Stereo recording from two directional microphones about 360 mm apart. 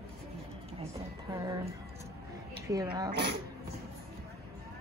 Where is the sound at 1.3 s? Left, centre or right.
Centre.